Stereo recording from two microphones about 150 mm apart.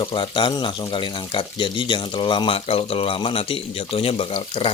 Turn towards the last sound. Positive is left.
turn(degrees=40)  # may be behind; listen again after turning